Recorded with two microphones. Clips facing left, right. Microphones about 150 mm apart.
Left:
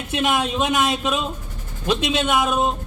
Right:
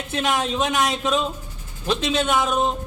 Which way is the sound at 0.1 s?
15° left (ahead or behind).